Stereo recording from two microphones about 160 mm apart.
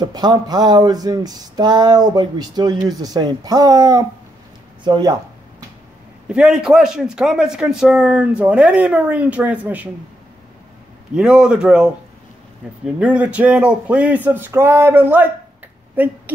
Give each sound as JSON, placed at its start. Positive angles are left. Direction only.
{"t": 0.0, "sound": "speech", "side_deg": -25}
{"t": 6.2, "sound": "a man's voice", "side_deg": -5}
{"t": 11.1, "sound": "a man's voice", "side_deg": -5}